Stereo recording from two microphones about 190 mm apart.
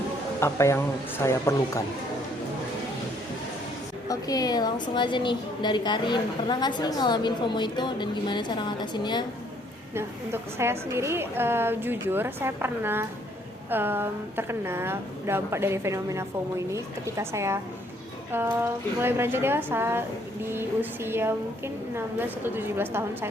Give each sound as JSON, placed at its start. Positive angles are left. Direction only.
{"t": 0.3, "sound": "speech", "side_deg": 15}
{"t": 4.1, "sound": "a woman's voice", "side_deg": 20}
{"t": 9.9, "sound": "a woman's voice", "side_deg": -15}